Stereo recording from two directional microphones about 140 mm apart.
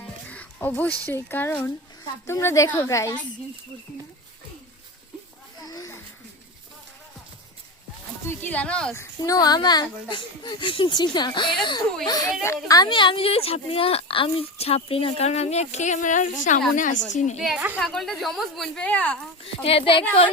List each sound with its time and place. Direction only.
0.0 s music: 10° left (ahead or behind)
2.2 s a woman's voice: 20° left (ahead or behind)
5.6 s a sound: 25° left (ahead or behind)
8.3 s speech: 15° left (ahead or behind)
9.0 s a child's voice: 25° left (ahead or behind); by 17.3 s 60° left (ahead or behind)
17.3 s a woman's voice: centre (ahead or behind)
19.6 s a child's voice: 40° left (ahead or behind)